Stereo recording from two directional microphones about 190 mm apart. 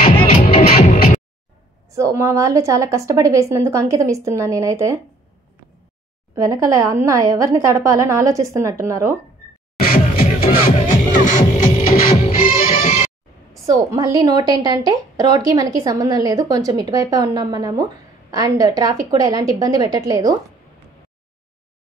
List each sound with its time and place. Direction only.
0.0 s music: 45° left (ahead or behind)
1.9 s a woman's voice: 15° right (ahead or behind)
6.3 s a woman's voice: 15° right (ahead or behind)
9.8 s music: 50° left (ahead or behind)
13.7 s a woman's voice: 20° right (ahead or behind)